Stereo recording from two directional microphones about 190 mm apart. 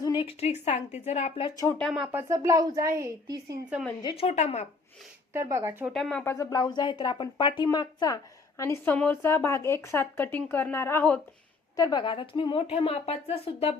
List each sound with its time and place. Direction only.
0.0 s a woman's voice: 25° left (ahead or behind)
1.5 s speech: 20° left (ahead or behind)
1.8 s speech: 5° right (ahead or behind)
2.3 s a woman's voice: 15° right (ahead or behind)
4.2 s a woman's voice: 35° left (ahead or behind)
5.3 s a woman's voice: 15° right (ahead or behind)
5.9 s speech: 5° left (ahead or behind)
6.3 s speech: 20° left (ahead or behind)
11.8 s speech: 20° left (ahead or behind)